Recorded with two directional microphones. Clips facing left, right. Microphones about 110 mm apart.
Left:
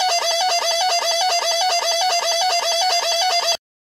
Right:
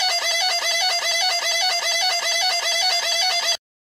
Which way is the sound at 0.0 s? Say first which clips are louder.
Left 6 dB; 30° left (ahead or behind).